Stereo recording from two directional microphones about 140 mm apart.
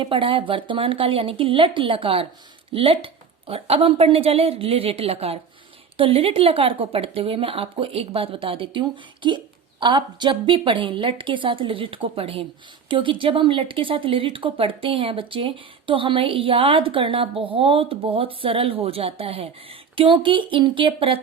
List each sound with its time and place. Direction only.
0.0 s a woman's voice: 40° right (ahead or behind)